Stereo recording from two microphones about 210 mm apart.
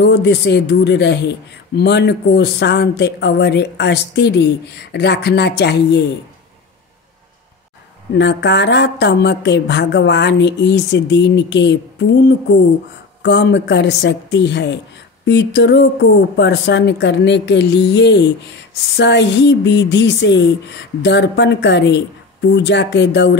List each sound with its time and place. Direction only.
0.0 s speech: 55° left (ahead or behind)
8.1 s a woman's voice: 55° left (ahead or behind)